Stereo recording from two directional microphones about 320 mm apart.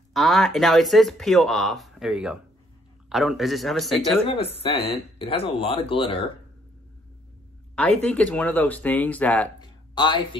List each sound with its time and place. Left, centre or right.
0.1 s speech: centre
4.6 s speech: centre
7.7 s speech: centre